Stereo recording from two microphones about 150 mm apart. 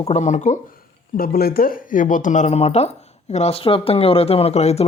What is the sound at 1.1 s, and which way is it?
Speech, 80° left.